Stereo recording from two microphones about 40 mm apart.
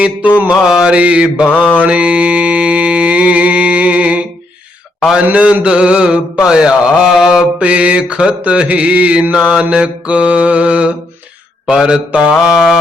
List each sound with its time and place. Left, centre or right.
0.0 s mantra: right
0.5 s mantra: centre
1.0 s mantra: right
4.9 s a man's voice: centre
5.6 s mantra: right
7.6 s mantra: right
12.3 s mantra: centre